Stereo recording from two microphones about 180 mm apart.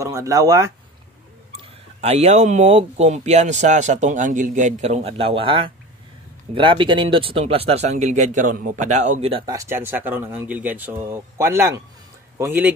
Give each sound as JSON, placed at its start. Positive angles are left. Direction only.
{"t": 0.0, "sound": "speech", "side_deg": -15}
{"t": 2.0, "sound": "speech", "side_deg": -35}
{"t": 9.5, "sound": "speech", "side_deg": -15}